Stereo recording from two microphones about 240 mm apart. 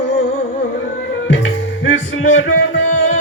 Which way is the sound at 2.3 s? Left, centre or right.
Left.